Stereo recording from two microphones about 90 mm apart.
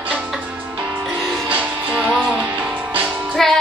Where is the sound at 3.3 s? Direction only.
5° left (ahead or behind).